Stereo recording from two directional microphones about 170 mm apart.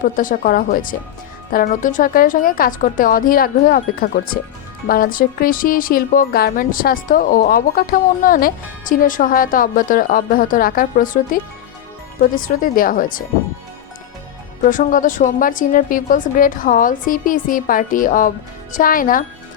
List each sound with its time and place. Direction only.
0.0 s a woman's voice: 55° left (ahead or behind)
14.6 s a woman's voice: 50° left (ahead or behind)